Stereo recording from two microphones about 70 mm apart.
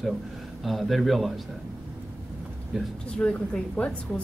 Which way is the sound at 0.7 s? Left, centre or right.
Centre.